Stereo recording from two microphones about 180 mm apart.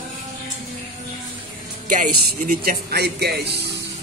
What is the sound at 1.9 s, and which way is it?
Speech, 45° right (ahead or behind).